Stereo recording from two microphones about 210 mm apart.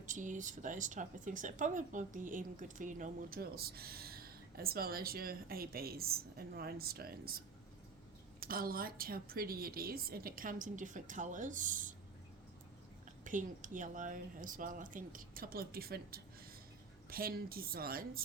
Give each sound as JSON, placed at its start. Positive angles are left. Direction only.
{"t": 0.0, "sound": "speech", "side_deg": -35}
{"t": 13.2, "sound": "speech", "side_deg": -40}